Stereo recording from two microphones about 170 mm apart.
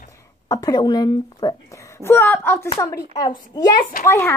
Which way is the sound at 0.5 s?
20° left (ahead or behind).